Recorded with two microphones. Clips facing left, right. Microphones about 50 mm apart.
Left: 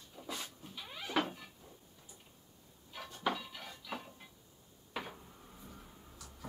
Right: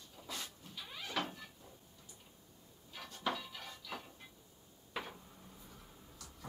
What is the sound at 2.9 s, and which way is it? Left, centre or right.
Dishes, centre.